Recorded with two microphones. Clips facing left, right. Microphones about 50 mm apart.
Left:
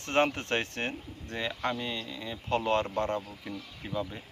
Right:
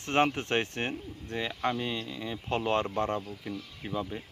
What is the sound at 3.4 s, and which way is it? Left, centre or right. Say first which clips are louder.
Speech: right 2 dB; centre.